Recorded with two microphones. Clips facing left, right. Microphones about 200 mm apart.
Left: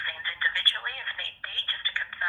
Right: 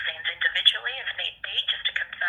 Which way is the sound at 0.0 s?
25° right (ahead or behind).